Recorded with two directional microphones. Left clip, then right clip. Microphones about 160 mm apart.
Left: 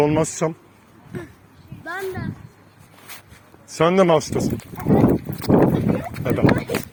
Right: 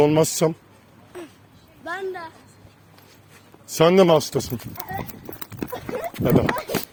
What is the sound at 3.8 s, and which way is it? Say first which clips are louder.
Speech: right 1 dB; 50° right (ahead or behind).